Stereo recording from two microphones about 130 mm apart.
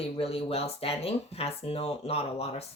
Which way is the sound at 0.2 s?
50° left (ahead or behind).